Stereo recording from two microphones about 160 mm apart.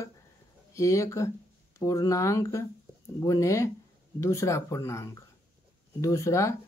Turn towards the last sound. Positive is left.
turn(degrees=20)  # may be behind; listen again after turning